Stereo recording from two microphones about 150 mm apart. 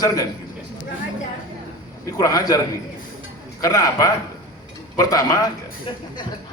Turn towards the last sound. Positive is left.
turn(degrees=25)  # may be behind; listen again after turning